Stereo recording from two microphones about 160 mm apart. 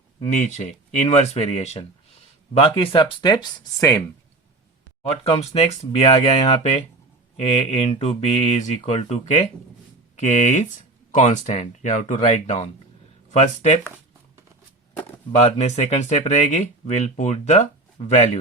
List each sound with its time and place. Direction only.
0.2 s speech: 45° left (ahead or behind); by 4.0 s 20° left (ahead or behind)
5.0 s speech: 40° left (ahead or behind)
15.4 s speech: 45° left (ahead or behind)